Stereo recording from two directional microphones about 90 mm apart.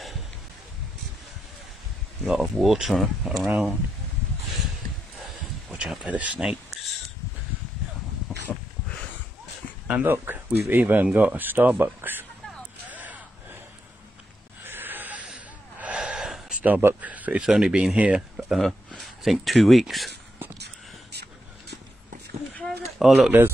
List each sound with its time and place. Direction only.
2.2 s speech: 5° right (ahead or behind)
5.7 s speech: 10° right (ahead or behind)
8.3 s a sound: 5° right (ahead or behind)
10.0 s speech: 25° right (ahead or behind)
12.8 s gasp: 20° right (ahead or behind)
14.6 s a sound: 20° right (ahead or behind)
15.2 s gasp: 15° right (ahead or behind)
16.6 s speech: 20° right (ahead or behind); by 20.1 s centre (ahead or behind)
22.7 s a sound: 5° right (ahead or behind)